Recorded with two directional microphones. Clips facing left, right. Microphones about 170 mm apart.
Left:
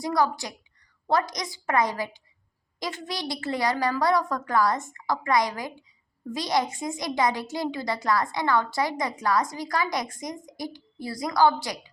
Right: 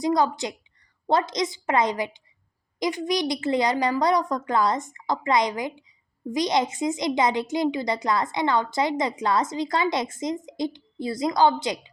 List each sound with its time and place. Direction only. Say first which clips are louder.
0.0 s a woman's voice: right 3 dB; 20° right (ahead or behind)